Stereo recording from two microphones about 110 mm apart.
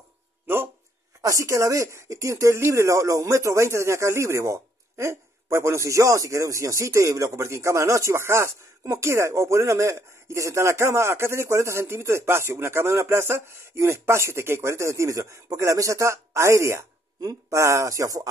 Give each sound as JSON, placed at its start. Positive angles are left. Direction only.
{"t": 1.2, "sound": "speech", "side_deg": -30}